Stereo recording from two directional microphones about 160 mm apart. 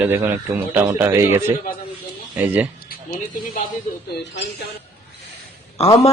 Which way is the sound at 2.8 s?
65° left (ahead or behind).